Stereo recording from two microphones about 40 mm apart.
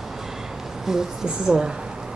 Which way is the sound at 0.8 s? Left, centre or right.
Centre.